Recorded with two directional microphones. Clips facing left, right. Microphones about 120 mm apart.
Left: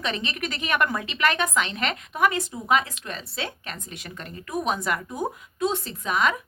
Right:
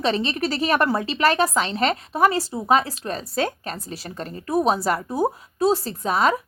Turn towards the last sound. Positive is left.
turn(degrees=-35)  # may be behind; listen again after turning